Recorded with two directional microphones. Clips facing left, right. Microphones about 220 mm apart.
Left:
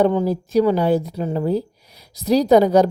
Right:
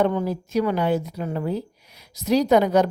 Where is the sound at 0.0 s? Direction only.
30° left (ahead or behind).